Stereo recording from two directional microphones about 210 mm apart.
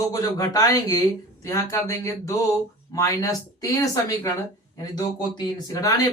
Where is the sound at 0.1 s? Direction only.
15° left (ahead or behind).